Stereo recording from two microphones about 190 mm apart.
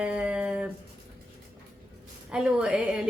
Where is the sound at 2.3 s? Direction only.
5° right (ahead or behind).